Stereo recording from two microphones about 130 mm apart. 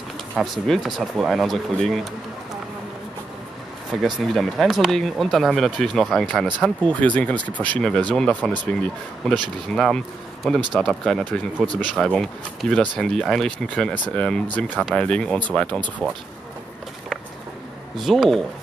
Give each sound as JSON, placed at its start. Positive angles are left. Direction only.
{"t": 0.4, "sound": "speech", "side_deg": 0}
{"t": 4.0, "sound": "speech", "side_deg": 0}
{"t": 11.6, "sound": "speech", "side_deg": -35}
{"t": 11.9, "sound": "speech", "side_deg": 5}
{"t": 17.9, "sound": "speech", "side_deg": 0}